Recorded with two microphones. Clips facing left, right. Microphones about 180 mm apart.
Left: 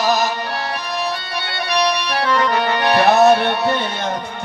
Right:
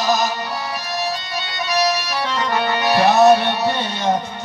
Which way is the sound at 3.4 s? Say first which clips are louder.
Left 2 dB; 55° left (ahead or behind).